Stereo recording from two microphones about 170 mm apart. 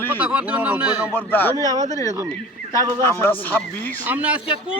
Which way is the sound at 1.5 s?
20° right (ahead or behind).